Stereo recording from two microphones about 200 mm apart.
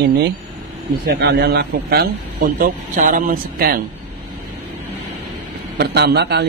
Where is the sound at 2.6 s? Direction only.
40° right (ahead or behind).